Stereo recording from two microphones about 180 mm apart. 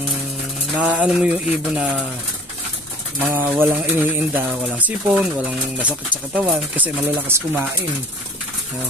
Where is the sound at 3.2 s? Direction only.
10° right (ahead or behind).